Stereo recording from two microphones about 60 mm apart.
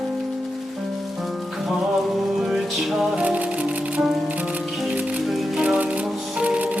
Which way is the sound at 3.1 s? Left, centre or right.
Right.